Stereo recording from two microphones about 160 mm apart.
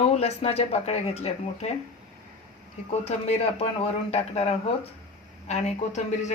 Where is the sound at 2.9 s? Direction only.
40° left (ahead or behind).